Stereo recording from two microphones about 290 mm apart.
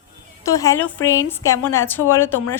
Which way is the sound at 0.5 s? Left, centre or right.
Centre.